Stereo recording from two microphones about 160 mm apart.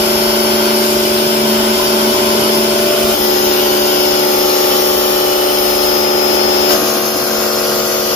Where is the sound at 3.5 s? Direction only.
50° left (ahead or behind).